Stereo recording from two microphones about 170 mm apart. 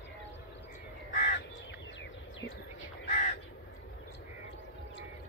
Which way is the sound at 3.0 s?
45° left (ahead or behind).